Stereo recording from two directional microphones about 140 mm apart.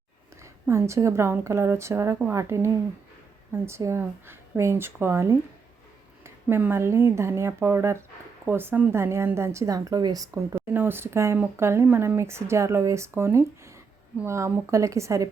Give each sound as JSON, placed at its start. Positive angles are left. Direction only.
{"t": 0.4, "sound": "a woman's voice", "side_deg": -20}